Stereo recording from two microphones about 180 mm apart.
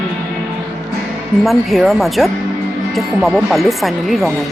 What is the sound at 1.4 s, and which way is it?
Speech, centre (ahead or behind).